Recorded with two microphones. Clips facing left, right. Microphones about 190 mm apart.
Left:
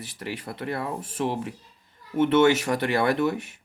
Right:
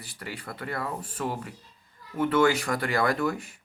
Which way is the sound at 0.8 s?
15° left (ahead or behind).